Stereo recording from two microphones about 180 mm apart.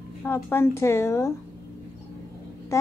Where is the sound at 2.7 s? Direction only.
15° left (ahead or behind).